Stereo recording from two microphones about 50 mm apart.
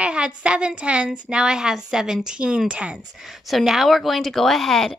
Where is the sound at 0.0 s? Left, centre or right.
Right.